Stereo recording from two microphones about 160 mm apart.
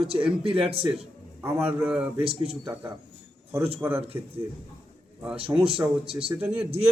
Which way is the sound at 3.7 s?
10° right (ahead or behind).